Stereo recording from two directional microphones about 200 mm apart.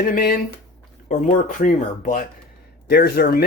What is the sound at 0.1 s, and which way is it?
Speech, 45° left (ahead or behind).